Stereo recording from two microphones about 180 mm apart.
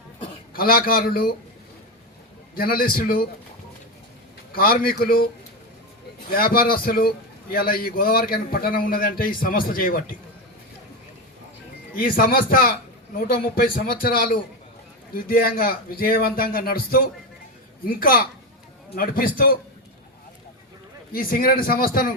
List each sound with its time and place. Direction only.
0.5 s a man's voice: 55° left (ahead or behind)
2.6 s speech: 55° left (ahead or behind)
4.5 s speech: 55° left (ahead or behind)
6.3 s a man's voice: 55° left (ahead or behind)
11.9 s a man's voice: 55° left (ahead or behind)
21.1 s a man's voice: 55° left (ahead or behind)